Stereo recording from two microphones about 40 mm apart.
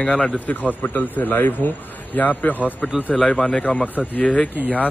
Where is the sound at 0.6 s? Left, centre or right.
Left.